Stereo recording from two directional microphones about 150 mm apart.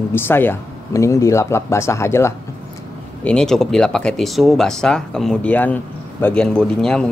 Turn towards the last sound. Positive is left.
turn(degrees=5)  # may be behind; listen again after turning